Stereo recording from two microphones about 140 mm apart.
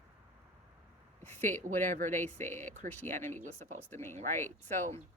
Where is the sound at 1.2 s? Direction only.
15° left (ahead or behind).